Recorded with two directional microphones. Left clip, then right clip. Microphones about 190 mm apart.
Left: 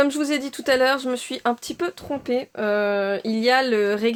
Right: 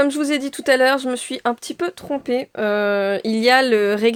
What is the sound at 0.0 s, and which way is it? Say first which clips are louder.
Speech: right 2 dB; 25° right (ahead or behind).